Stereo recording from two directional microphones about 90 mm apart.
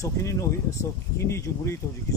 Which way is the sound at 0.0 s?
35° left (ahead or behind).